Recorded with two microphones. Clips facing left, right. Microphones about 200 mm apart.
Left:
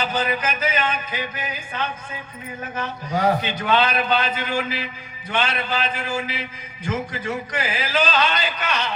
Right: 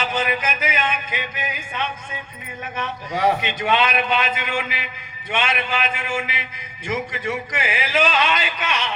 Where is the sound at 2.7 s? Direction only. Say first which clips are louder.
Left 1 dB; 35° left (ahead or behind).